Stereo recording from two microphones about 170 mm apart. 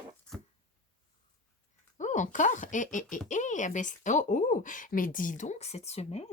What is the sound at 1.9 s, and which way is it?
Speech, 45° left (ahead or behind).